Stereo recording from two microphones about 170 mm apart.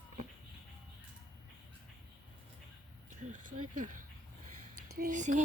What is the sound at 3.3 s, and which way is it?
Speech, 50° right (ahead or behind).